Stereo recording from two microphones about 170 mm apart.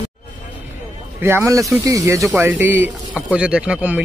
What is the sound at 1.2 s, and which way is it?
Speech, 15° right (ahead or behind).